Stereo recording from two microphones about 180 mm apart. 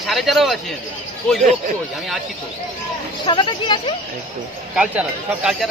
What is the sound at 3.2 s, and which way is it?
Speech, 25° left (ahead or behind).